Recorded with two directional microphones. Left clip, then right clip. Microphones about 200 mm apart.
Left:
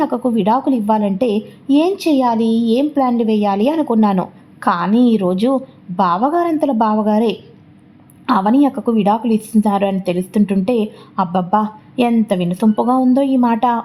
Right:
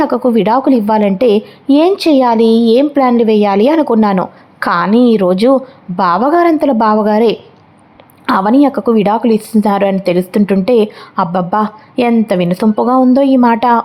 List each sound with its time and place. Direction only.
0.0 s a woman's voice: 20° right (ahead or behind)